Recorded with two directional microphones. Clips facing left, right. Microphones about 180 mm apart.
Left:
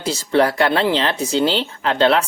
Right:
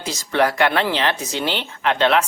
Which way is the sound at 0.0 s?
30° left (ahead or behind).